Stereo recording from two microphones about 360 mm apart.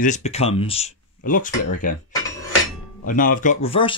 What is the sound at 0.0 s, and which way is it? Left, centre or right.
Speech, centre.